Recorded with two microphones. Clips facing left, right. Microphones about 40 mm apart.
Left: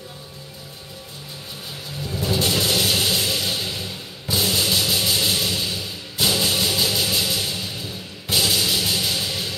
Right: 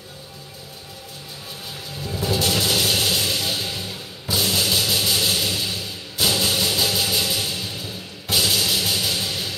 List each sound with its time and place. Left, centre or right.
2.0 s music: centre